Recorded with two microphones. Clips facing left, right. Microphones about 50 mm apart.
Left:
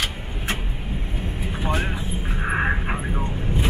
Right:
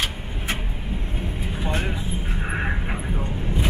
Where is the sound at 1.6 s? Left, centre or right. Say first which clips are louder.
Left 2 dB; left.